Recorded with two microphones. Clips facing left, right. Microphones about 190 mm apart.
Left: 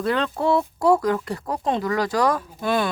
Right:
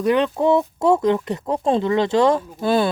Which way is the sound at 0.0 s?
15° right (ahead or behind).